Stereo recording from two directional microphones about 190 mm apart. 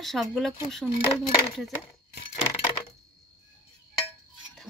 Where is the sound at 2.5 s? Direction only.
25° left (ahead or behind).